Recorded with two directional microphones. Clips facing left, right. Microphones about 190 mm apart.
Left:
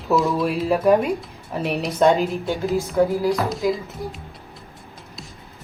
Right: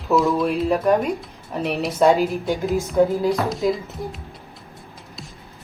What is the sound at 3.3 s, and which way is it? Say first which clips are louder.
Speech: even; centre (ahead or behind).